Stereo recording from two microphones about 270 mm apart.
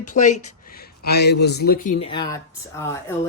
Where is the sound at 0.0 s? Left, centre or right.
Left.